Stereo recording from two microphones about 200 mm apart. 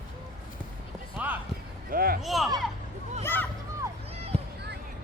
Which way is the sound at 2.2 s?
Centre (ahead or behind).